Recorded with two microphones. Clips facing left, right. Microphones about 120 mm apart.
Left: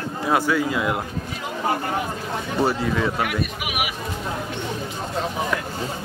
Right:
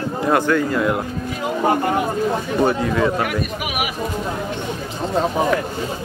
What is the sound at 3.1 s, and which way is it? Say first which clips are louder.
Speech: right 3 dB; 45° right (ahead or behind).